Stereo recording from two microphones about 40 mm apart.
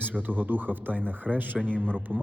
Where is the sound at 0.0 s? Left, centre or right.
Right.